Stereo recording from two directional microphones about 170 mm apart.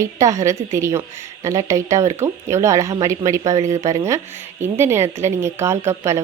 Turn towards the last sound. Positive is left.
turn(degrees=-15)  # may be behind; listen again after turning